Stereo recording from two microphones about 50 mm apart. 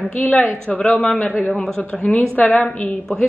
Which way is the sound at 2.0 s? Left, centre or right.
Left.